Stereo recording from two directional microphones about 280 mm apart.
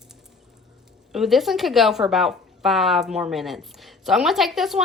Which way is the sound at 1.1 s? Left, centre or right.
Centre.